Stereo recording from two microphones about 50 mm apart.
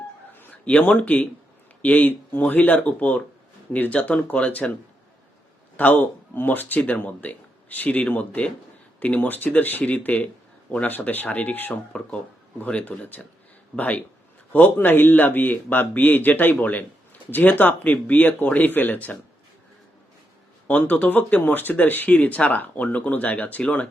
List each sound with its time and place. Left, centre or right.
0.6 s speech: left
5.7 s speech: left
9.2 s speech: left
9.8 s speech: left
12.8 s speech: left
20.7 s speech: left